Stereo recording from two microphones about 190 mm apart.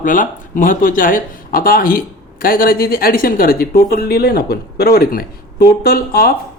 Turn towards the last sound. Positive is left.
turn(degrees=50)  # may be behind; listen again after turning